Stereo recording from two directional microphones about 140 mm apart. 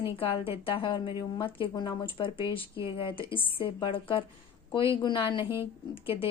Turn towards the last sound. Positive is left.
turn(degrees=40)  # may be behind; listen again after turning